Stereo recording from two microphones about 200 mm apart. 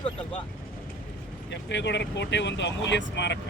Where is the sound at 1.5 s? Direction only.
60° left (ahead or behind).